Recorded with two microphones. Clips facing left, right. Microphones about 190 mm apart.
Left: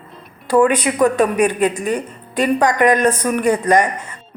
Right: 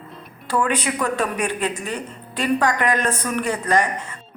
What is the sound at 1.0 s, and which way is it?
A woman's voice, 15° left (ahead or behind).